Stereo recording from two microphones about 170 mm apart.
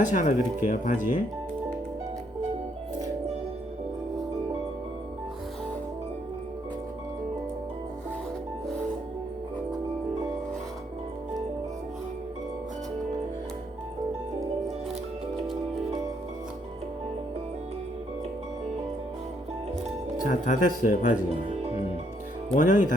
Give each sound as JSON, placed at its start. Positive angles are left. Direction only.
{"t": 0.1, "sound": "speech", "side_deg": 45}
{"t": 20.3, "sound": "speech", "side_deg": 50}
{"t": 22.5, "sound": "speech", "side_deg": 50}